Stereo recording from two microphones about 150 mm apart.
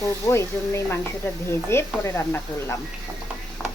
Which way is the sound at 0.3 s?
15° left (ahead or behind).